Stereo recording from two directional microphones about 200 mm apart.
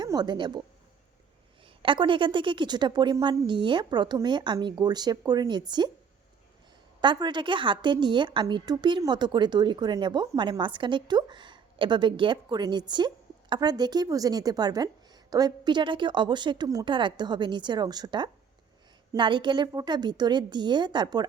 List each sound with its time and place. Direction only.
0.0 s speech: 20° right (ahead or behind)
1.6 s a woman's voice: 25° right (ahead or behind)
7.0 s a woman's voice: 25° right (ahead or behind)